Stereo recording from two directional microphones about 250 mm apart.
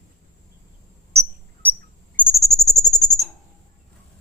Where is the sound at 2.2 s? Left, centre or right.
Centre.